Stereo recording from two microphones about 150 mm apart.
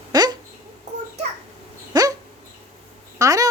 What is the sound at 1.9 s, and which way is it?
Dog, 25° right (ahead or behind).